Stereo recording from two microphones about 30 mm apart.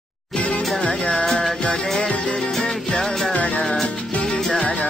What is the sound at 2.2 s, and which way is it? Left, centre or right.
Music, centre.